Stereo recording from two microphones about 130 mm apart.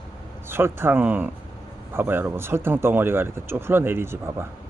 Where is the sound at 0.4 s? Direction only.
20° right (ahead or behind).